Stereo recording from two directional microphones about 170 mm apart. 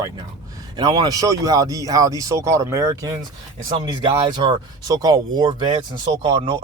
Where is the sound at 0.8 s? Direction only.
25° right (ahead or behind).